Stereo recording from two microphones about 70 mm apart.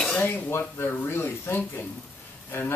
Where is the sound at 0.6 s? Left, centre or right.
Left.